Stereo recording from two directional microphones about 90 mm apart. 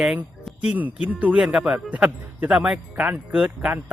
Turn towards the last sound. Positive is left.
turn(degrees=-10)  # may be behind; listen again after turning